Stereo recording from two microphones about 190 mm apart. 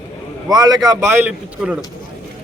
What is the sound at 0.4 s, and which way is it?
A man's voice, 20° right (ahead or behind).